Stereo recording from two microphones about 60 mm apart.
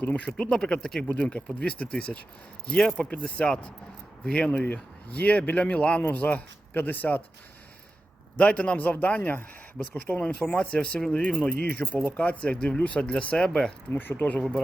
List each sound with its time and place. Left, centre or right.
0.0 s speech: left
0.3 s speech: centre
3.0 s speech: left
6.0 s speech: left
8.4 s speech: left
13.9 s speech: left